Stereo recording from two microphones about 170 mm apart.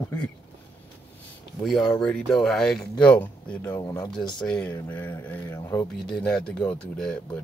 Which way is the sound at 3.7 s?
20° left (ahead or behind).